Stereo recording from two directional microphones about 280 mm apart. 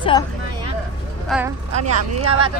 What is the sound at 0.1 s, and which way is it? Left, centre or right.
Speech, centre.